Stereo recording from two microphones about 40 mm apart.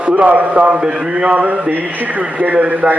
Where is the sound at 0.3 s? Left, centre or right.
Right.